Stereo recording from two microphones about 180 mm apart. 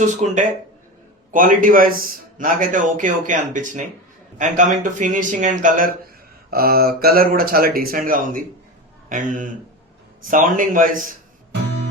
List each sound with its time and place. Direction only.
0.0 s a man's voice: 45° right (ahead or behind)